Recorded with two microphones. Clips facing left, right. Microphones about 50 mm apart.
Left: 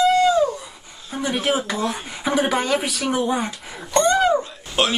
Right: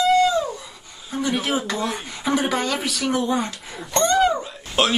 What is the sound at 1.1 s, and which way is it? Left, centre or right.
Speech, centre.